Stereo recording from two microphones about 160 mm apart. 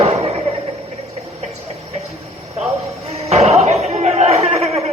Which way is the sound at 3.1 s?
40° right (ahead or behind).